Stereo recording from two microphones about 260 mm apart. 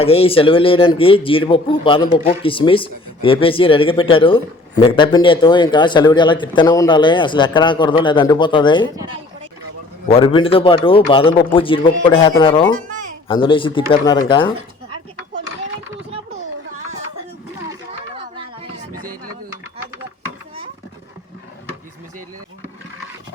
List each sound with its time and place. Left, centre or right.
0.0 s a man's voice: left
10.1 s a man's voice: centre
17.7 s a sound: centre